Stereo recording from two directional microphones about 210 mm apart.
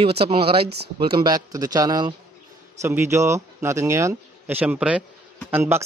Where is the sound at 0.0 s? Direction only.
25° right (ahead or behind).